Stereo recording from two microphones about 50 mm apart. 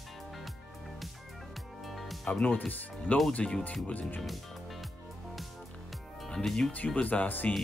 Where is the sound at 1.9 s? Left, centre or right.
Centre.